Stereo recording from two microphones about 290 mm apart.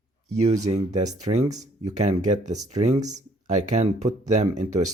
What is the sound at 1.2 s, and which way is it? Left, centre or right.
Speech, centre.